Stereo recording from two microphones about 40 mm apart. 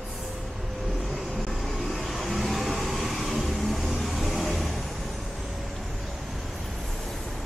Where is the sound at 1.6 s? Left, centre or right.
Centre.